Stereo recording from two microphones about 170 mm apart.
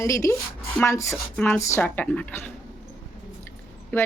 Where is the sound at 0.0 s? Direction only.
20° left (ahead or behind).